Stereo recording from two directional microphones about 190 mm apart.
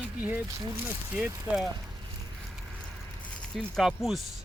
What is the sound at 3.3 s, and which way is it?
Speech, 5° left (ahead or behind).